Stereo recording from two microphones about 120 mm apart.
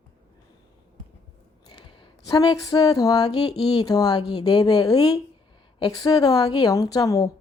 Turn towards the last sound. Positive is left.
turn(degrees=30)  # may be behind; listen again after turning